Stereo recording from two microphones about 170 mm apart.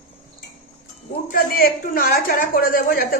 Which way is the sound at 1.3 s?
60° left (ahead or behind).